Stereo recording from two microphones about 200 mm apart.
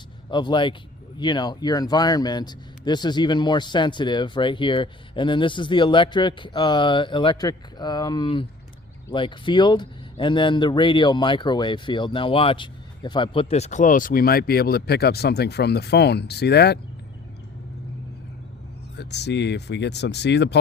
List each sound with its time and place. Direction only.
0.3 s speech: 20° left (ahead or behind); by 16.7 s 55° left (ahead or behind)
18.9 s speech: 60° left (ahead or behind)